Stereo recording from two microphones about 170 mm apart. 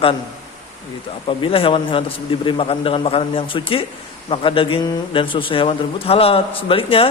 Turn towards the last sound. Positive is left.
turn(degrees=30)  # may be behind; listen again after turning